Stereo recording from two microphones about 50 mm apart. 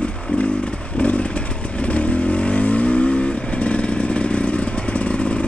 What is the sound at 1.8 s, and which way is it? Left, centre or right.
Vehicle, left.